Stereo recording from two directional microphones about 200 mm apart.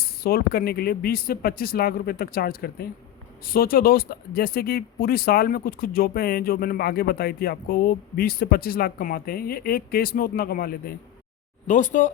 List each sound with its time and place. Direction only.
0.0 s speech: 50° left (ahead or behind)